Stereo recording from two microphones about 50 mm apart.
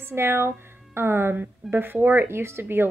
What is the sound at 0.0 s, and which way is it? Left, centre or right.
A woman's voice, right.